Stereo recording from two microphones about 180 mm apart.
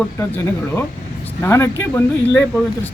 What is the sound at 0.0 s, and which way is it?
Speech, 15° left (ahead or behind).